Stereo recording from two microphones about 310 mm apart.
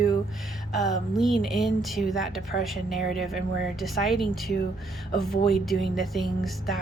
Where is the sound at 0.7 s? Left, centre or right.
Centre.